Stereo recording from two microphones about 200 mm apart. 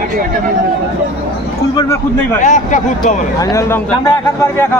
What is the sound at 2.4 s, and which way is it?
Speech, 40° left (ahead or behind).